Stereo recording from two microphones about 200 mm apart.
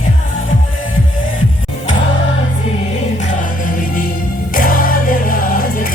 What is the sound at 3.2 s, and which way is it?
Music, 45° left (ahead or behind).